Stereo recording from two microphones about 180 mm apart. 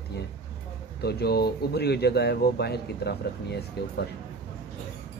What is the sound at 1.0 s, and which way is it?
Speech, 60° left (ahead or behind).